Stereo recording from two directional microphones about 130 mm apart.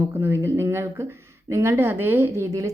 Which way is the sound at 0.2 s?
20° right (ahead or behind).